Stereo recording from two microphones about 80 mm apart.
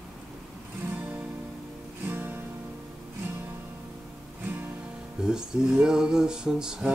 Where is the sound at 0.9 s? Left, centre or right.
Centre.